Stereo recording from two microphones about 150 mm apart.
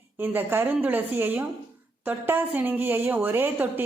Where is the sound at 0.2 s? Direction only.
15° right (ahead or behind).